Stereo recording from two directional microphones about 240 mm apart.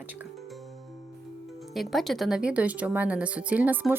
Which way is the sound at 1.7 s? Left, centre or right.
Centre.